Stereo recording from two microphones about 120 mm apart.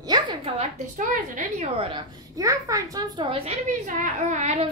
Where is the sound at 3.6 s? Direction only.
90° right.